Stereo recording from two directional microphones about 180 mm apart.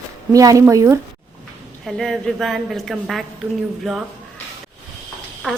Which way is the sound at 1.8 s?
Centre (ahead or behind).